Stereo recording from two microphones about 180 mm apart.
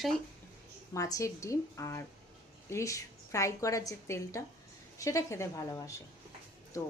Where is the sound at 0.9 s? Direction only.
20° left (ahead or behind).